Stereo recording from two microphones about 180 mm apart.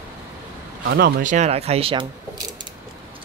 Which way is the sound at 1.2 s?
40° right (ahead or behind).